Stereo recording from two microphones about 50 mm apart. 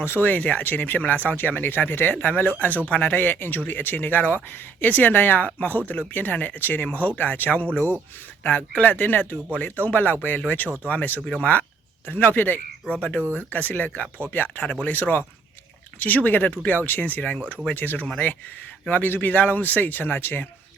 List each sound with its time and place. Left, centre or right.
0.0 s speech: left
0.3 s speech: left